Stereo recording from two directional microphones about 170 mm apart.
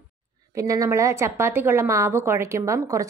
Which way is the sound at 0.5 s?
20° right (ahead or behind).